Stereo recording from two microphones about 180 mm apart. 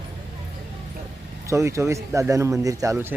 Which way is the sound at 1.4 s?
15° right (ahead or behind).